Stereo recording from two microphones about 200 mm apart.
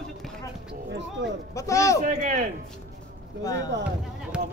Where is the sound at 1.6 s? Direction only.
15° left (ahead or behind).